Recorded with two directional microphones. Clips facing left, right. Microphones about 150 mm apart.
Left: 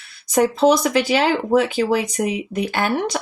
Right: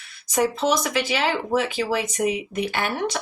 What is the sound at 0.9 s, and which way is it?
Speech, 45° left (ahead or behind).